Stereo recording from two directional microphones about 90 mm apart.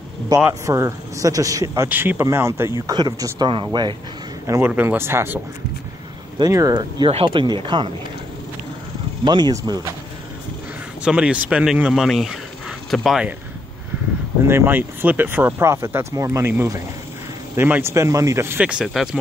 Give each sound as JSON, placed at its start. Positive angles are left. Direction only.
{"t": 0.3, "sound": "a man's voice", "side_deg": -45}
{"t": 1.9, "sound": "speech", "side_deg": -20}
{"t": 2.9, "sound": "speech", "side_deg": -45}
{"t": 3.7, "sound": "speech", "side_deg": -50}
{"t": 4.5, "sound": "speech", "side_deg": -25}
{"t": 6.5, "sound": "speech", "side_deg": -45}
{"t": 9.2, "sound": "speech", "side_deg": -55}
{"t": 9.5, "sound": "a man's voice", "side_deg": -40}
{"t": 11.1, "sound": "a man's voice", "side_deg": -10}
{"t": 14.4, "sound": "speech", "side_deg": -25}
{"t": 17.6, "sound": "speech", "side_deg": -25}
{"t": 17.9, "sound": "a man's voice", "side_deg": -35}
{"t": 18.6, "sound": "a man's voice", "side_deg": -10}